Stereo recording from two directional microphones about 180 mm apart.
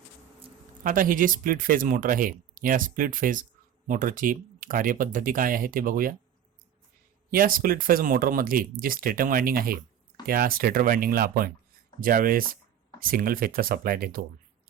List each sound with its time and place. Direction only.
0.9 s speech: 50° right (ahead or behind)
7.3 s speech: 50° right (ahead or behind)